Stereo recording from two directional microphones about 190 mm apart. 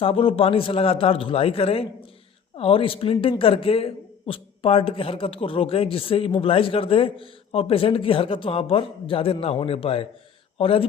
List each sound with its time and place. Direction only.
0.0 s a man's voice: 30° left (ahead or behind)